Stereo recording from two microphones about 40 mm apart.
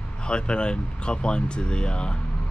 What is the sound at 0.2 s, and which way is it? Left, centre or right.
Speech, left.